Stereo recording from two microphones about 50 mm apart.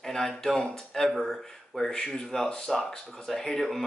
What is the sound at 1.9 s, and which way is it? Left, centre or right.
Speech, centre.